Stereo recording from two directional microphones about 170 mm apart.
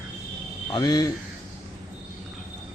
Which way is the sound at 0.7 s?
25° left (ahead or behind).